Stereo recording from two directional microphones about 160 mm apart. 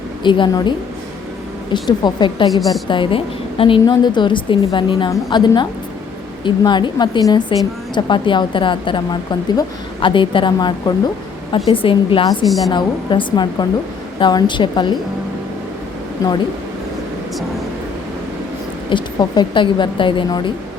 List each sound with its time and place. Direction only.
0.2 s a woman's voice: 30° left (ahead or behind)
1.7 s a woman's voice: 30° left (ahead or behind)
12.5 s a woman's voice: centre (ahead or behind)
12.7 s a woman's voice: 30° left (ahead or behind)
18.9 s a woman's voice: 30° left (ahead or behind)